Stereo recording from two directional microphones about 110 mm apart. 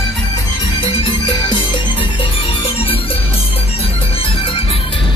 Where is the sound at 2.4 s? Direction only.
60° left (ahead or behind).